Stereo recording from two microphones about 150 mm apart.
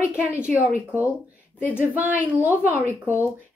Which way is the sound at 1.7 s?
10° right (ahead or behind).